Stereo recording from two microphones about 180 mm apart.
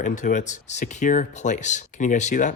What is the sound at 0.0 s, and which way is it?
Speech, 45° left (ahead or behind).